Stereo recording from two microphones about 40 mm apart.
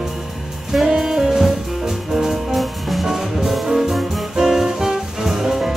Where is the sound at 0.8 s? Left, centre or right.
Centre.